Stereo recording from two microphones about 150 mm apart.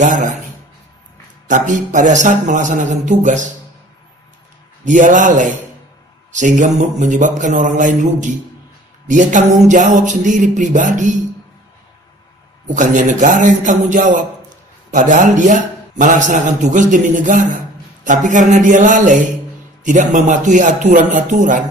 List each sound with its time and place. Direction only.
0.0 s a man's voice: 60° right (ahead or behind)
1.5 s a man's voice: 60° right (ahead or behind)
4.8 s a man's voice: 55° right (ahead or behind)
12.6 s a man's voice: 55° right (ahead or behind)